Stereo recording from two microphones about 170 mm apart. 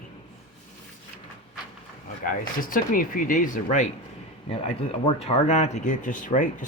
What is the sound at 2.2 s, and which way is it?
Speech, 55° left (ahead or behind).